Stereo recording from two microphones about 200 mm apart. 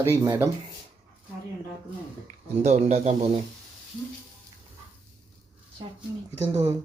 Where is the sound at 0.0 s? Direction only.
15° right (ahead or behind).